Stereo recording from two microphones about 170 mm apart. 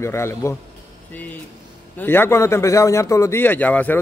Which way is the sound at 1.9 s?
15° left (ahead or behind).